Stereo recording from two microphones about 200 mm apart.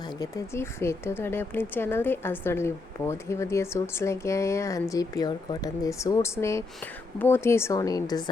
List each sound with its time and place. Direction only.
0.0 s a woman's voice: 20° left (ahead or behind)